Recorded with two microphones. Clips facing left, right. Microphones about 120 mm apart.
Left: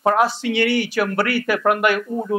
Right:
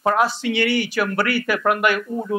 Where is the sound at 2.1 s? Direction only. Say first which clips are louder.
Left 2 dB; 20° left (ahead or behind).